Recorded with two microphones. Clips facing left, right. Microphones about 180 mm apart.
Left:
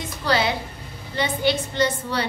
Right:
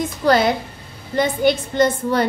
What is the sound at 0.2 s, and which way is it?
A woman's voice, 50° right (ahead or behind).